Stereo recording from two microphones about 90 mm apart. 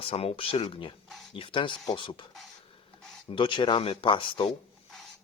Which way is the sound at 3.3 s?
60° left (ahead or behind).